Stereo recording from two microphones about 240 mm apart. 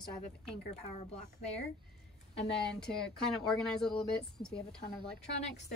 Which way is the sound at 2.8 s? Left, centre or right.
Centre.